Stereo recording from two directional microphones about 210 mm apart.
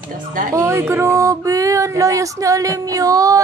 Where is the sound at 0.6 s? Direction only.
10° right (ahead or behind).